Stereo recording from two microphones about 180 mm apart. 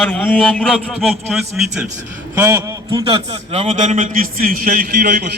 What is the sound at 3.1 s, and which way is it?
A man's voice, 35° right (ahead or behind).